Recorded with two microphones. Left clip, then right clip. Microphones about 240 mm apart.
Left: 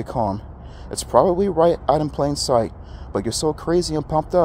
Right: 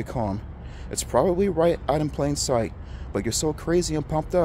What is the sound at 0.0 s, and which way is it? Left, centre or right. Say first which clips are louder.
Speech: left 6 dB; centre.